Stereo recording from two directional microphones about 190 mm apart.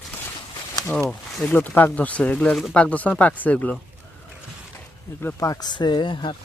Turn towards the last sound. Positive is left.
turn(degrees=25)  # may be behind; listen again after turning